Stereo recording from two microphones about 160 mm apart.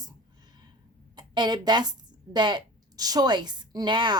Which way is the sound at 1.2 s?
25° right (ahead or behind).